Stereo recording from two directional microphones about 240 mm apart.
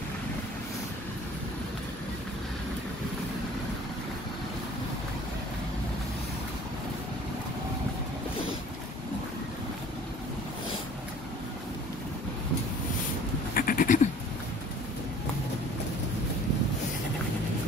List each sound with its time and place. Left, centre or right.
13.6 s goat: left